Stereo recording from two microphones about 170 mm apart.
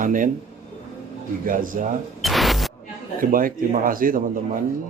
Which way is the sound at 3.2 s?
55° right (ahead or behind).